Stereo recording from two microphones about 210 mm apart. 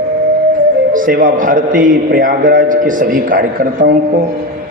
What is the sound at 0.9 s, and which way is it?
A man's voice, 40° right (ahead or behind).